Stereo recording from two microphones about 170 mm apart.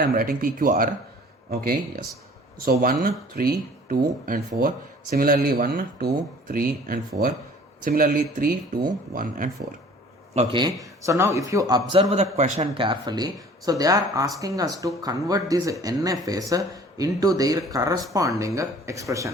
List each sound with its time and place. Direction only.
0.0 s speech: 60° right (ahead or behind)
10.3 s speech: 25° right (ahead or behind)
11.9 s speech: 35° right (ahead or behind); by 19.3 s 20° right (ahead or behind)